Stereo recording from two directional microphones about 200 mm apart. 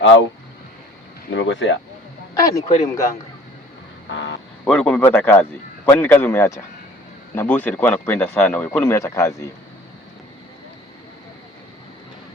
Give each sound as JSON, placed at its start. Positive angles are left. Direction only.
{"t": 0.0, "sound": "speech", "side_deg": 70}
{"t": 1.4, "sound": "speech", "side_deg": 70}
{"t": 2.3, "sound": "speech", "side_deg": 15}
{"t": 4.1, "sound": "speech", "side_deg": 70}
{"t": 4.6, "sound": "speech", "side_deg": 5}